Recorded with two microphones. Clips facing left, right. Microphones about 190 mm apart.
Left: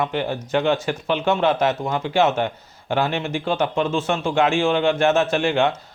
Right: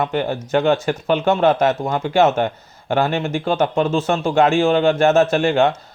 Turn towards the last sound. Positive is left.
turn(degrees=-40)  # may be behind; listen again after turning